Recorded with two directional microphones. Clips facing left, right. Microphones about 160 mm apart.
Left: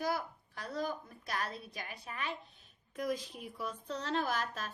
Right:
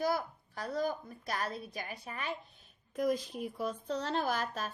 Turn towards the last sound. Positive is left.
turn(degrees=-40)  # may be behind; listen again after turning